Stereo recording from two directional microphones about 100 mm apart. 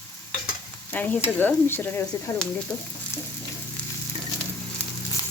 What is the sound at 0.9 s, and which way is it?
Speech, 15° left (ahead or behind).